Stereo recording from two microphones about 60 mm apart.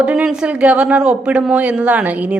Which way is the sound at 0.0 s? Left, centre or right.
Centre.